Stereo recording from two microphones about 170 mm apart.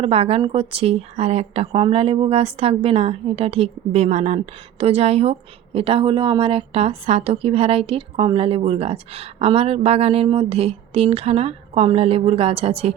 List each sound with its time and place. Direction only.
0.0 s a woman's voice: 35° right (ahead or behind)